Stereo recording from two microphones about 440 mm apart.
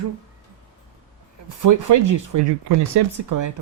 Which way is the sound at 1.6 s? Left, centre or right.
Right.